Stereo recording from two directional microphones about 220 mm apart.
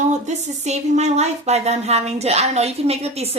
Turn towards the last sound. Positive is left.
turn(degrees=-30)  # may be behind; listen again after turning